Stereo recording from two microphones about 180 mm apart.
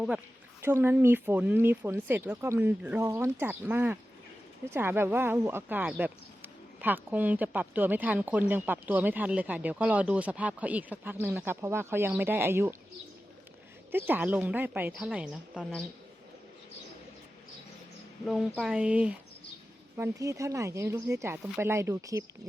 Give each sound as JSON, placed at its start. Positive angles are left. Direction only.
{"t": 0.6, "sound": "speech", "side_deg": -10}
{"t": 13.9, "sound": "speech", "side_deg": -10}
{"t": 18.3, "sound": "speech", "side_deg": 0}
{"t": 20.0, "sound": "speech", "side_deg": -15}